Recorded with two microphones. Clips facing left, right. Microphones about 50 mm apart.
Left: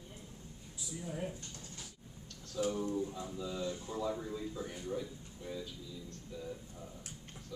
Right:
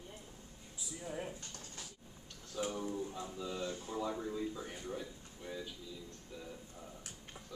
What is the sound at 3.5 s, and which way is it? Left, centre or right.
Speech, right.